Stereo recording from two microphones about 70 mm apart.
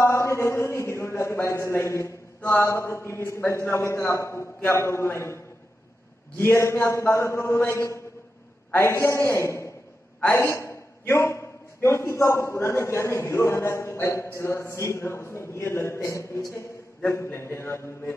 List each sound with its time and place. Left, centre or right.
0.0 s a sound: left
2.6 s a man's voice: left
17.1 s a man's voice: left